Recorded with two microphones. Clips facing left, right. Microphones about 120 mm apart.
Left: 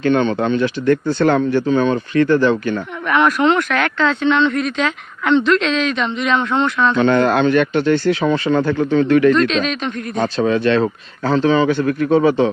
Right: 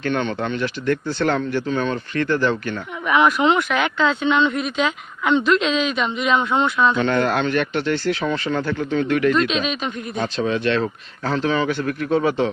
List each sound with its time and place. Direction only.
0.0 s speech: 15° left (ahead or behind)
0.9 s speech: 50° left (ahead or behind)
1.6 s speech: 20° left (ahead or behind)
3.1 s speech: 5° right (ahead or behind)
7.0 s speech: 50° left (ahead or behind)
8.1 s speech: 20° left (ahead or behind)
8.5 s speech: 45° left (ahead or behind)
9.3 s speech: 5° right (ahead or behind)
10.2 s speech: 40° left (ahead or behind)
11.3 s speech: 20° left (ahead or behind)
11.9 s speech: 35° left (ahead or behind)